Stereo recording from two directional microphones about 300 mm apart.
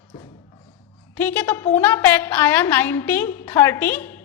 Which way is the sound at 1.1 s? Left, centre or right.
Centre.